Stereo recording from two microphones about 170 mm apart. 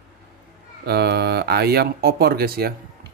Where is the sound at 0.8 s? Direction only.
70° right (ahead or behind).